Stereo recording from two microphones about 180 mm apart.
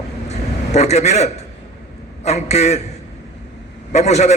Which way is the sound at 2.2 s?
35° left (ahead or behind).